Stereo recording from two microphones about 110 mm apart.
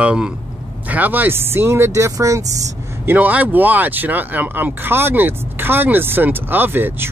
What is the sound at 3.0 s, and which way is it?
Speech, 15° right (ahead or behind).